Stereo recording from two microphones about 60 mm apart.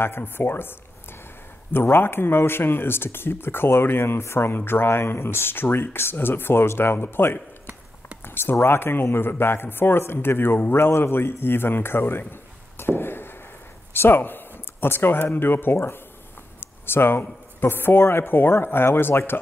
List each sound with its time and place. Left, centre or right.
0.0 s a man's voice: left
16.5 s a sound: left
17.6 s a man's voice: left